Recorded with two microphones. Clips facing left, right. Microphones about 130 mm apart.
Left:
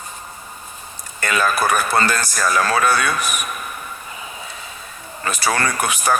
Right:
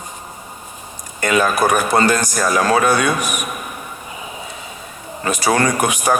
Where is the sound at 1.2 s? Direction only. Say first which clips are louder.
Right 4 dB; 20° right (ahead or behind).